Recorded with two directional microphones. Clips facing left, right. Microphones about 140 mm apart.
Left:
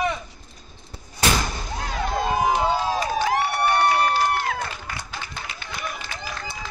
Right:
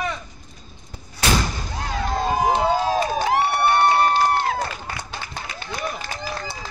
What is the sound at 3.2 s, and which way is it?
Crowd, 25° right (ahead or behind).